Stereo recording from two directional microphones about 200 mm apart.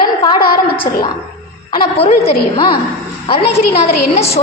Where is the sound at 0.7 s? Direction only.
25° left (ahead or behind).